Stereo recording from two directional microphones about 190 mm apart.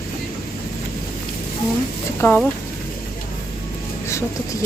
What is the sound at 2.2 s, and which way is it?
Speech, 10° left (ahead or behind).